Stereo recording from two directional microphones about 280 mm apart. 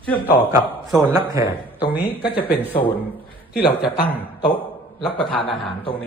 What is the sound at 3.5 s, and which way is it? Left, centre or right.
Speech, left.